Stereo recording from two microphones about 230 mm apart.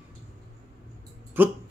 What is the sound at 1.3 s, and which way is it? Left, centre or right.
Speech, centre.